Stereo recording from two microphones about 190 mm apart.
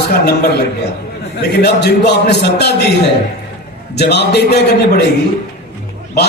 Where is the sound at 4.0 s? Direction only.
60° left (ahead or behind).